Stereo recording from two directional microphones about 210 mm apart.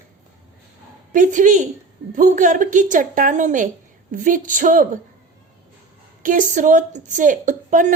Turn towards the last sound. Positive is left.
turn(degrees=-35)  # may be behind; listen again after turning